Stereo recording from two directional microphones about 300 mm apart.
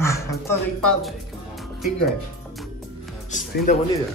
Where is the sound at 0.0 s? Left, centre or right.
Centre.